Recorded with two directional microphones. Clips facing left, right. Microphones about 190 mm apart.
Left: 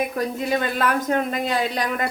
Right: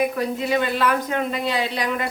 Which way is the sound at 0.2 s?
45° left (ahead or behind).